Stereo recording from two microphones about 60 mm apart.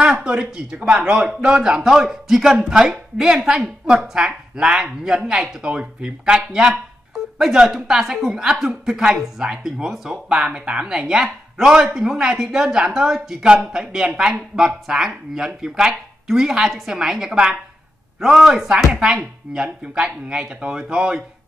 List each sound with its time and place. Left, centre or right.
0.0 s a woman's voice: centre